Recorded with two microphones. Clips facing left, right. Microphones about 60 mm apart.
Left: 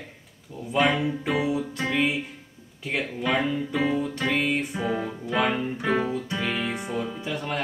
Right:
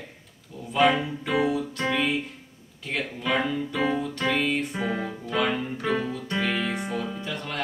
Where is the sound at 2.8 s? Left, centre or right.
Centre.